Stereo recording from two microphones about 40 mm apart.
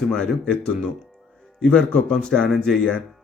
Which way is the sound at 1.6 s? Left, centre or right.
Left.